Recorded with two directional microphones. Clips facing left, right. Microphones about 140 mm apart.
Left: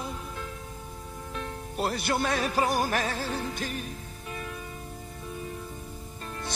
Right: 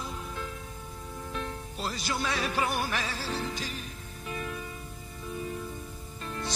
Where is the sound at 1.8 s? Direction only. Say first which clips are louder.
Left 6 dB; 60° left (ahead or behind).